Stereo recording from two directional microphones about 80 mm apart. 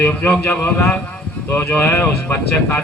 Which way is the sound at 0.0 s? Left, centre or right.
Left.